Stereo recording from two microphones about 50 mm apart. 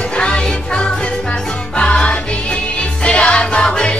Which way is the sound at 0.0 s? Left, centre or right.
Left.